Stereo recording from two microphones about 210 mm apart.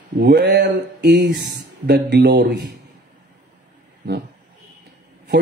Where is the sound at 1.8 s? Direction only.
50° right (ahead or behind).